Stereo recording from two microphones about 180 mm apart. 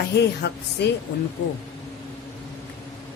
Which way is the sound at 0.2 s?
70° left (ahead or behind).